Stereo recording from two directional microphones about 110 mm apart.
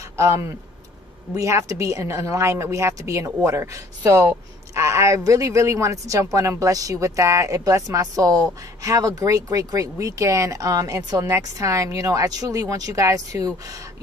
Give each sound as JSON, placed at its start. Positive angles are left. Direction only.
{"t": 0.2, "sound": "speech", "side_deg": -25}